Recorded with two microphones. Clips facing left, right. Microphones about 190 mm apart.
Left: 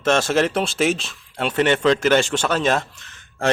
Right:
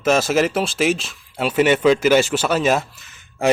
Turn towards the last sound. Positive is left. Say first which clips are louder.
# right 3 dB
turn(degrees=-5)  # may be behind; listen again after turning